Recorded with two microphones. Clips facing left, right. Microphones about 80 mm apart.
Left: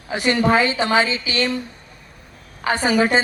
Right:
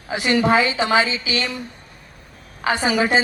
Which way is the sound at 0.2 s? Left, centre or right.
Left.